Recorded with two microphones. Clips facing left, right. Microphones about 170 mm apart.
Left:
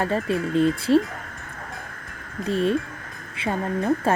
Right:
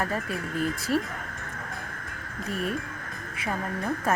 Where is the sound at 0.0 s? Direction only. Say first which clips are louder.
Left 7 dB; 25° left (ahead or behind).